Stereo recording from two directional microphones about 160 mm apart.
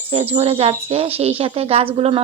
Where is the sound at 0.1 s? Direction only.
40° right (ahead or behind).